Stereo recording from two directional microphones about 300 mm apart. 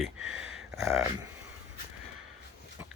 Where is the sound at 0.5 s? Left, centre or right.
Centre.